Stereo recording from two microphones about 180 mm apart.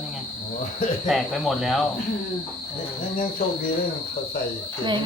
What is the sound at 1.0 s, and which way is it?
Speech, centre (ahead or behind).